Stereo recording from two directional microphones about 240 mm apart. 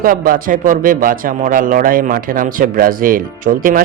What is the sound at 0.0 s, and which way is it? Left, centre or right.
Speech, right.